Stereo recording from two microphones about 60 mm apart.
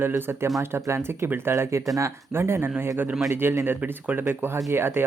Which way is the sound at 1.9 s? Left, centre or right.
Right.